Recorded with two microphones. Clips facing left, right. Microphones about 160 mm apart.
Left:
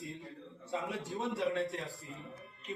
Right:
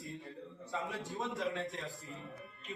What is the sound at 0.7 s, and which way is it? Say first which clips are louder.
Speech: left 3 dB; 20° left (ahead or behind).